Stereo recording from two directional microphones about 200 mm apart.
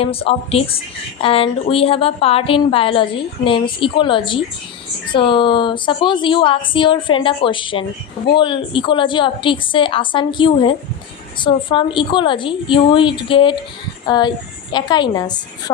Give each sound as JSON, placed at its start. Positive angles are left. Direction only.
{"t": 0.0, "sound": "a woman's voice", "side_deg": 30}